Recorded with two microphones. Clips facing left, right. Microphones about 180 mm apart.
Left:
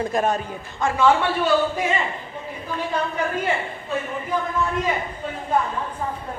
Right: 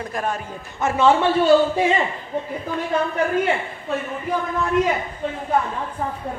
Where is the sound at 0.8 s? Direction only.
20° right (ahead or behind).